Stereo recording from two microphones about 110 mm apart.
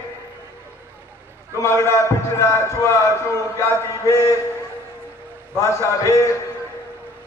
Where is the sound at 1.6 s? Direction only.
25° left (ahead or behind).